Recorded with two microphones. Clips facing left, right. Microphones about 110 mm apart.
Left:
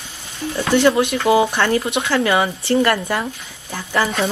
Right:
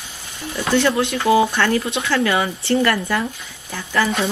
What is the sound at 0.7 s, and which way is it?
Speech, 20° left (ahead or behind).